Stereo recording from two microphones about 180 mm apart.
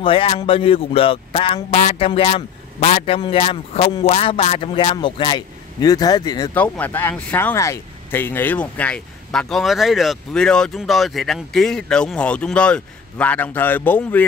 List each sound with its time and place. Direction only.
0.0 s speech: 30° left (ahead or behind)
6.5 s speech: 10° left (ahead or behind)